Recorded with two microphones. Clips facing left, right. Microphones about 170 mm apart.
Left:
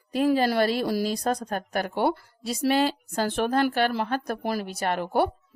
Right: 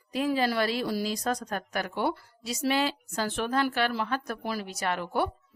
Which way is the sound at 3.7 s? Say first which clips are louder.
Left 4 dB; 50° left (ahead or behind).